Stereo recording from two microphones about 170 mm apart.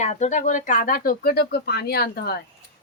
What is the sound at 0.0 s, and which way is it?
Speech, 45° left (ahead or behind).